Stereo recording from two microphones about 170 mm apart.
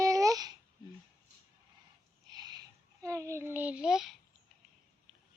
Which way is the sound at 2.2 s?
25° right (ahead or behind).